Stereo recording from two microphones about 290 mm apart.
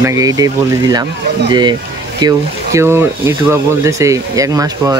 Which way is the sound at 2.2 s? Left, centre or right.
Centre.